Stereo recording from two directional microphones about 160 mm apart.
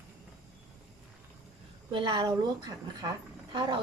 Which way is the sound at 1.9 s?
30° right (ahead or behind).